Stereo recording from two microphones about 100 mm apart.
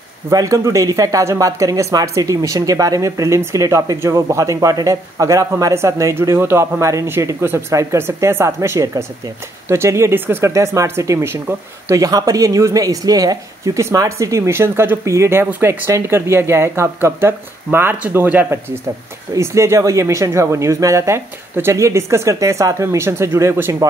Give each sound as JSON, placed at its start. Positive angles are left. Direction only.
{"t": 0.3, "sound": "speech", "side_deg": -35}
{"t": 12.0, "sound": "speech", "side_deg": -40}
{"t": 19.3, "sound": "speech", "side_deg": -30}